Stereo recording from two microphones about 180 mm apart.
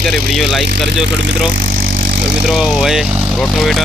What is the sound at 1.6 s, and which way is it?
Vehicle, 50° right (ahead or behind).